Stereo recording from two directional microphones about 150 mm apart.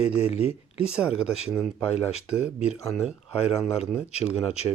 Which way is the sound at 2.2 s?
5° right (ahead or behind).